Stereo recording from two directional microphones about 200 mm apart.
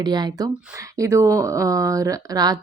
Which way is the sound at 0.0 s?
20° right (ahead or behind).